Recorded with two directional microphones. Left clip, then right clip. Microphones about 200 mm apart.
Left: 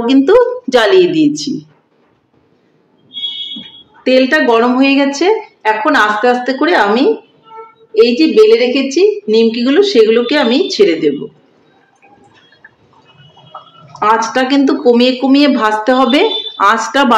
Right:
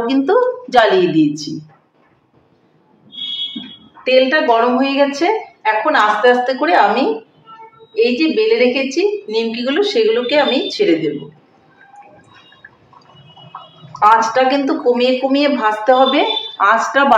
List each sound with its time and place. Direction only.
0.0 s a woman's voice: 30° left (ahead or behind)
4.0 s a woman's voice: 55° left (ahead or behind)
13.9 s speech: 55° left (ahead or behind); by 17.0 s 35° left (ahead or behind)